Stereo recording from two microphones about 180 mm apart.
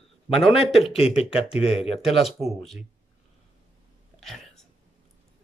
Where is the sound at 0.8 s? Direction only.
35° left (ahead or behind).